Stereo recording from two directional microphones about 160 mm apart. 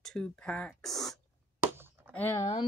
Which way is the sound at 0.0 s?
5° left (ahead or behind).